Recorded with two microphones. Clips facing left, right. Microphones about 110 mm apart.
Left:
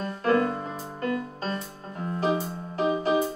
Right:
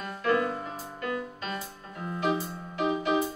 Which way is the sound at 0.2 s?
40° left (ahead or behind).